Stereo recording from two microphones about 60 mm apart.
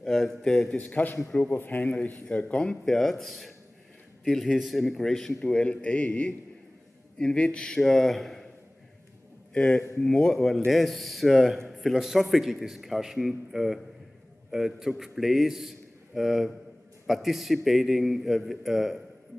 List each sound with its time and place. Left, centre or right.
0.0 s a man's voice: centre
0.7 s a man's voice: left
2.2 s a man's voice: centre
9.5 s a man's voice: centre